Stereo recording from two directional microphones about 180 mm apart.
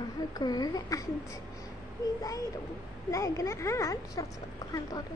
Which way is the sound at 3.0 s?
20° left (ahead or behind).